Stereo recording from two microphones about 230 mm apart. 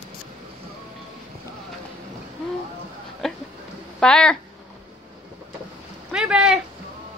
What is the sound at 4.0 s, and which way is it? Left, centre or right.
Speech, centre.